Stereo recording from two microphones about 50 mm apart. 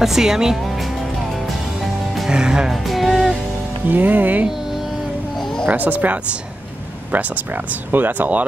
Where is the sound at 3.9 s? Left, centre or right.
Right.